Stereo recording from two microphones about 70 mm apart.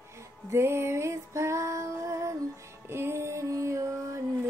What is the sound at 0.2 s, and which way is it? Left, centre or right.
Music, right.